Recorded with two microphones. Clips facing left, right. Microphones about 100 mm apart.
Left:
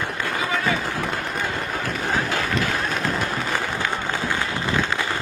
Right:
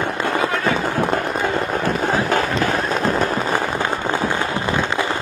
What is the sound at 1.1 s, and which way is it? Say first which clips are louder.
Run: right 7 dB; 40° right (ahead or behind).